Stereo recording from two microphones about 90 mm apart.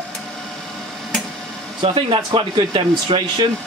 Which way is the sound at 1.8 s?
75° right (ahead or behind).